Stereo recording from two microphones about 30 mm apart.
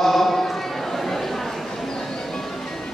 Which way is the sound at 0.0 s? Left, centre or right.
Centre.